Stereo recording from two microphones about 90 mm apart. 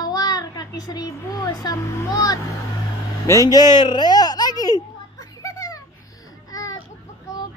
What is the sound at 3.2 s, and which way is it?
Music, 40° left (ahead or behind).